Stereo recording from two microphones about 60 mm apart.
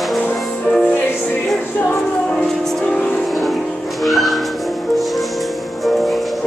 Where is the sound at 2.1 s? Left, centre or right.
Centre.